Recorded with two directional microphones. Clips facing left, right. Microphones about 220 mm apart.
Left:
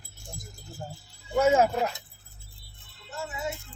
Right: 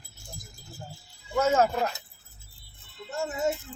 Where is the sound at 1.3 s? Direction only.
10° left (ahead or behind).